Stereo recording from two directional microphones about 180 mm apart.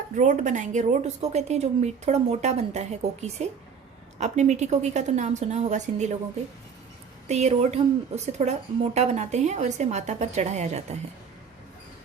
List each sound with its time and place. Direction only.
0.2 s a woman's voice: 45° right (ahead or behind)
7.3 s a woman's voice: 35° right (ahead or behind)